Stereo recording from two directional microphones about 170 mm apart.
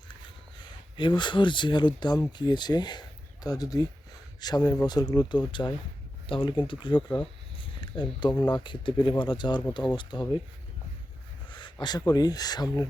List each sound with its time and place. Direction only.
0.9 s speech: 25° left (ahead or behind)
7.6 s a sound: 30° left (ahead or behind)
8.4 s speech: 25° left (ahead or behind)
11.4 s speech: 25° left (ahead or behind)